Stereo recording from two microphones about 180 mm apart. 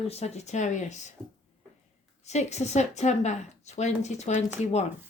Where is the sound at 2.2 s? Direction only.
40° left (ahead or behind).